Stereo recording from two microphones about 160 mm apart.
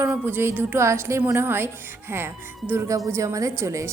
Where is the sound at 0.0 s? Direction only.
10° right (ahead or behind).